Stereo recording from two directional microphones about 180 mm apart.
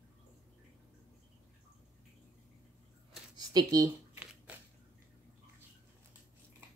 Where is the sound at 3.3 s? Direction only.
20° right (ahead or behind).